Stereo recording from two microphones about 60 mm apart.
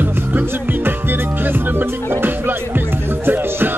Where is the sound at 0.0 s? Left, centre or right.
Right.